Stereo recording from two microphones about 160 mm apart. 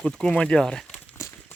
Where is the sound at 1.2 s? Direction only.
15° left (ahead or behind).